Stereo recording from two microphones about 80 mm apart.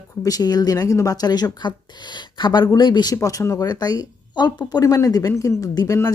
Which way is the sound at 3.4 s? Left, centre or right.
Left.